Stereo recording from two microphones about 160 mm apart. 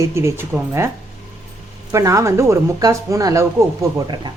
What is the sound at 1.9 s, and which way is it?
Speech, 20° right (ahead or behind).